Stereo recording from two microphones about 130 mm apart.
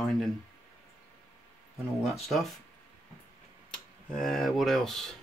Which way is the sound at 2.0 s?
Centre (ahead or behind).